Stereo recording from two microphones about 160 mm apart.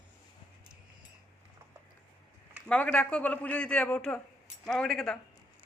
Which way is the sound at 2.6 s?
5° left (ahead or behind).